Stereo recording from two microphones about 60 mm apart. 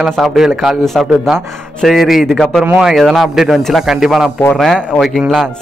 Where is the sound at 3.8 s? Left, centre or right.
Centre.